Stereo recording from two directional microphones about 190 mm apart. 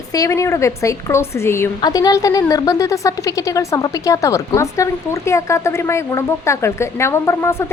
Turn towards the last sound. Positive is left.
turn(degrees=15)  # may be behind; listen again after turning